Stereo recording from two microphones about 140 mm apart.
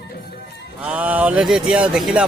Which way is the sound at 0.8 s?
10° right (ahead or behind).